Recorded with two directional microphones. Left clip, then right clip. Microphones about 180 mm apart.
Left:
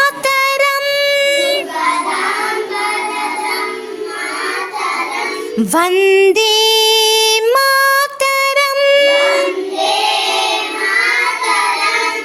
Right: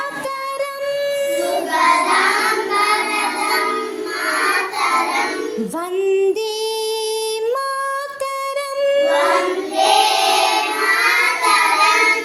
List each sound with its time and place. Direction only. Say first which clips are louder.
0.0 s music: left 11 dB; 30° left (ahead or behind)
5.7 s female singing: left 9 dB; 30° left (ahead or behind)